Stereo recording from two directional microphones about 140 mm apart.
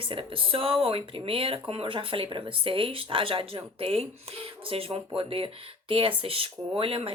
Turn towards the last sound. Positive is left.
turn(degrees=-40)  # may be behind; listen again after turning